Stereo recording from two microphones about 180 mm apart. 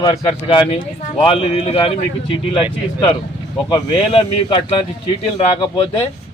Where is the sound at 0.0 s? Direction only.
25° left (ahead or behind).